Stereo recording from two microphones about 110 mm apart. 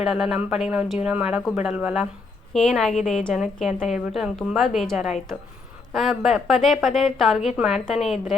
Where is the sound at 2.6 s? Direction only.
5° left (ahead or behind).